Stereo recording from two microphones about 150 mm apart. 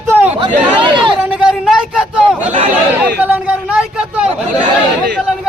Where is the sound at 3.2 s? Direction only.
10° right (ahead or behind).